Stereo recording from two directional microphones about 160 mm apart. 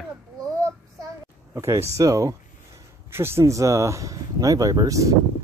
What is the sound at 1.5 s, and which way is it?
Speech, 15° right (ahead or behind).